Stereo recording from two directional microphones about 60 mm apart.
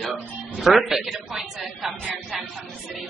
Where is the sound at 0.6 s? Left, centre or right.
Centre.